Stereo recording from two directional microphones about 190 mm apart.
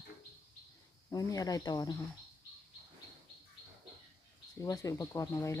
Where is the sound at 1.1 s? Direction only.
20° left (ahead or behind).